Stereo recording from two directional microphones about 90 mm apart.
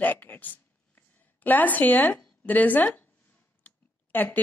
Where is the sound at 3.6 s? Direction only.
20° left (ahead or behind).